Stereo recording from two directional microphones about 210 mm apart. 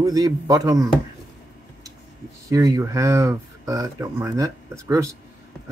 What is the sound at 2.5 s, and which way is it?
Speech, 15° right (ahead or behind).